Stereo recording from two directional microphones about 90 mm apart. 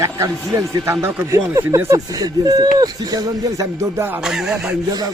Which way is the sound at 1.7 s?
35° right (ahead or behind).